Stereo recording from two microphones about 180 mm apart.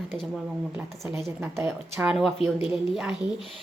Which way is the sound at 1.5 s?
15° right (ahead or behind).